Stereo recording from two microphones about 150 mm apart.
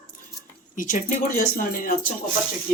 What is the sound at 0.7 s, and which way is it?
Speech, 60° left (ahead or behind).